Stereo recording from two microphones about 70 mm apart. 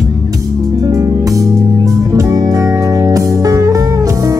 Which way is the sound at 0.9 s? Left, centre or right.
Right.